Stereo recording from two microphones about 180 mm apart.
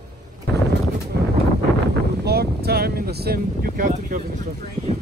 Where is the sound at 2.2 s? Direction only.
60° right (ahead or behind); by 4.9 s 45° right (ahead or behind).